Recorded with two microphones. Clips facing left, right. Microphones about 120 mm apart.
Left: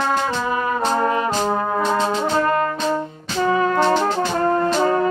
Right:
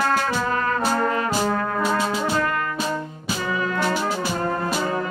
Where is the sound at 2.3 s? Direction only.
35° left (ahead or behind).